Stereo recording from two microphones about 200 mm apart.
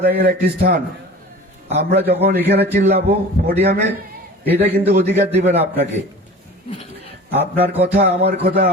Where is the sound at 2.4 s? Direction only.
55° right (ahead or behind).